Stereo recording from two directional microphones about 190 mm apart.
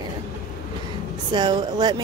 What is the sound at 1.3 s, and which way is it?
Speech, 25° right (ahead or behind).